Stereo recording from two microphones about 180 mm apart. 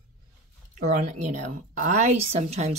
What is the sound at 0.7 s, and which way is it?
A woman's voice, 45° right (ahead or behind).